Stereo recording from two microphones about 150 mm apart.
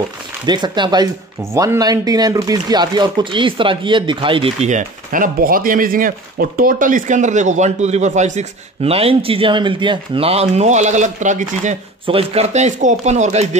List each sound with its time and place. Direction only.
0.5 s speech: 30° right (ahead or behind); by 11.7 s 55° right (ahead or behind)
12.1 s speech: 40° right (ahead or behind)